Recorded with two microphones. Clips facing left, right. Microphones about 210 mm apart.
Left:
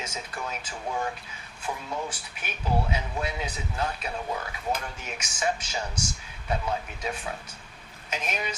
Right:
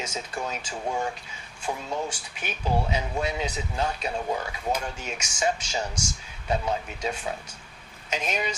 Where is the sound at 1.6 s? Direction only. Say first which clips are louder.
Right 3 dB; 30° right (ahead or behind).